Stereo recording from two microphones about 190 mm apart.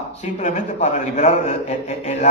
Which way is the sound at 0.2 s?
40° left (ahead or behind).